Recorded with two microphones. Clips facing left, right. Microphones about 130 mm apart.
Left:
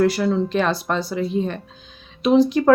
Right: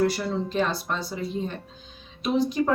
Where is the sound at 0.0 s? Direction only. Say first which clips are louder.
Left 6 dB; 85° left.